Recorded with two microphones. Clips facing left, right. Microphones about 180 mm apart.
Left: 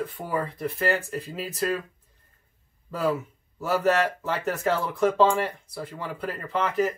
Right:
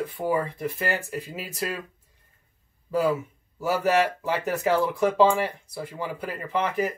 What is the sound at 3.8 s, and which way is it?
Speech, 10° right (ahead or behind).